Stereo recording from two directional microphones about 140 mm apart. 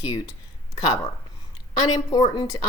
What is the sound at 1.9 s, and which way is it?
Speech, 30° left (ahead or behind).